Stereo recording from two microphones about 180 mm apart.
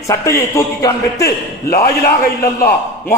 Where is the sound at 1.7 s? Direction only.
55° left (ahead or behind).